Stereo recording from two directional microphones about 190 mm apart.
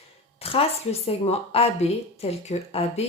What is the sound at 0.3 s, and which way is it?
Speech, 30° left (ahead or behind).